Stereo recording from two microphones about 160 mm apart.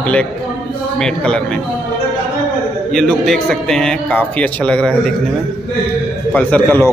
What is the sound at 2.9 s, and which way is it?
A man's voice, centre (ahead or behind).